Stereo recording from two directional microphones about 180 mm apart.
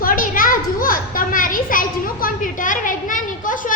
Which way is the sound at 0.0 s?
50° left (ahead or behind).